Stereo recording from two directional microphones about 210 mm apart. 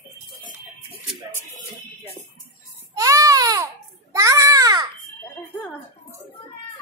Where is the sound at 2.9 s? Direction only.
15° right (ahead or behind).